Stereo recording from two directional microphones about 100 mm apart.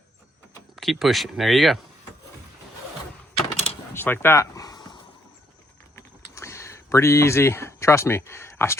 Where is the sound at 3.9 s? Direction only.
25° left (ahead or behind); by 5.0 s 45° left (ahead or behind).